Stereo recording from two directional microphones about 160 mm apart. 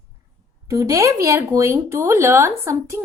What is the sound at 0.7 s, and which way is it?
A woman's voice, 20° right (ahead or behind).